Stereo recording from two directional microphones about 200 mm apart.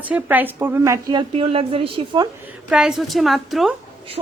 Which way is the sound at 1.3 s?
30° right (ahead or behind).